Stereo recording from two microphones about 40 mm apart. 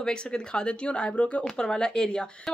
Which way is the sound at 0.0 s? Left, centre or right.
Left.